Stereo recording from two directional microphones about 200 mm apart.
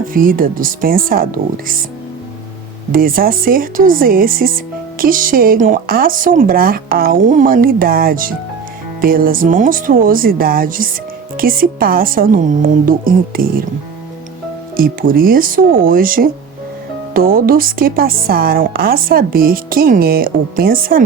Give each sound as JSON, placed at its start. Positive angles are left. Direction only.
{"t": 0.1, "sound": "speech", "side_deg": -45}
{"t": 2.9, "sound": "speech", "side_deg": -45}
{"t": 14.8, "sound": "speech", "side_deg": -45}